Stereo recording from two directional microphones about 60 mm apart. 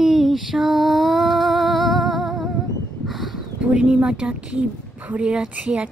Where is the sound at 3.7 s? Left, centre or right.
Centre.